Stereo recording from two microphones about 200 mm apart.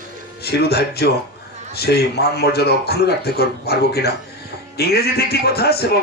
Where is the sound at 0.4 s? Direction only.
55° left (ahead or behind).